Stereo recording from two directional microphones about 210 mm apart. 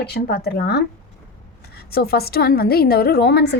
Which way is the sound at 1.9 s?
45° left (ahead or behind).